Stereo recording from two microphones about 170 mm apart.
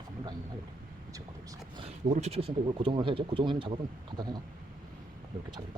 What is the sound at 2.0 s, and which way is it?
Speech, 45° right (ahead or behind).